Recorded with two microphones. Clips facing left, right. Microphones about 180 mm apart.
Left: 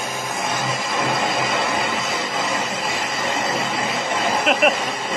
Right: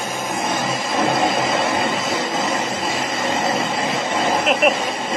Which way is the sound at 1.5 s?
30° right (ahead or behind).